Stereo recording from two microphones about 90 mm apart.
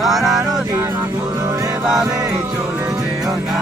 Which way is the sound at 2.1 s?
40° right (ahead or behind).